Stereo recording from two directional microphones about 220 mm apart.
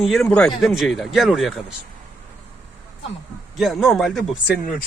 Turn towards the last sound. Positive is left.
turn(degrees=0)  # may be behind; listen again after turning